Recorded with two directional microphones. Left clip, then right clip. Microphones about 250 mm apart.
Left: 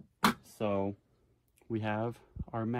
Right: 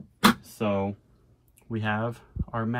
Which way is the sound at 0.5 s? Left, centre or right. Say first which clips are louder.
Right 5 dB; left.